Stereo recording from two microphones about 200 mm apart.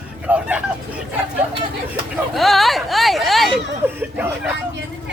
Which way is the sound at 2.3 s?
Centre (ahead or behind).